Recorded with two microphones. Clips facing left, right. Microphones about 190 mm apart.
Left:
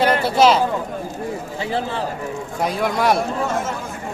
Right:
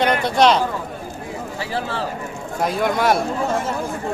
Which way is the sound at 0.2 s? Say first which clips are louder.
Left 1 dB; 5° left (ahead or behind).